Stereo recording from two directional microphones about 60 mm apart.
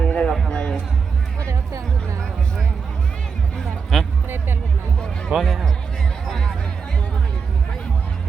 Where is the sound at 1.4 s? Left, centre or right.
Right.